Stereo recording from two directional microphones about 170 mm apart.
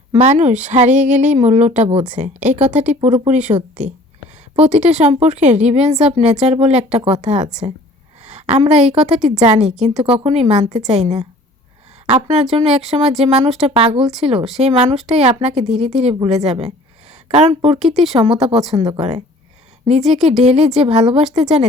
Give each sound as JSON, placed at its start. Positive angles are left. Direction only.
{"t": 0.1, "sound": "speech", "side_deg": -40}
{"t": 2.4, "sound": "speech", "side_deg": -10}
{"t": 2.9, "sound": "a woman's voice", "side_deg": -40}
{"t": 9.1, "sound": "speech", "side_deg": 0}
{"t": 9.4, "sound": "a woman's voice", "side_deg": -40}
{"t": 17.7, "sound": "speech", "side_deg": 0}
{"t": 18.1, "sound": "a woman's voice", "side_deg": -35}
{"t": 20.0, "sound": "speech", "side_deg": 0}
{"t": 20.4, "sound": "a woman's voice", "side_deg": -40}